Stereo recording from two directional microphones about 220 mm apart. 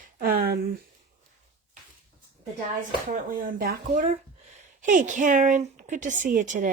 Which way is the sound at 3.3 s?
40° right (ahead or behind).